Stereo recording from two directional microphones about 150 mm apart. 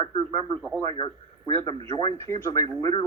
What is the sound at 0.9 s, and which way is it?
Speech, 30° left (ahead or behind).